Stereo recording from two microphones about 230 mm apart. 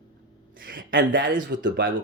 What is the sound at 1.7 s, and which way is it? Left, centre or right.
Speech, right.